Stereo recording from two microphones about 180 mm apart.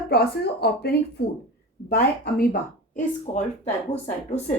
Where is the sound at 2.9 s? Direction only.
40° left (ahead or behind).